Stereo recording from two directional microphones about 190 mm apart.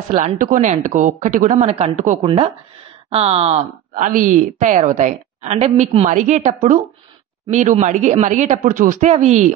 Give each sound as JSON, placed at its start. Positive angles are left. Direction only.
{"t": 0.1, "sound": "speech", "side_deg": -40}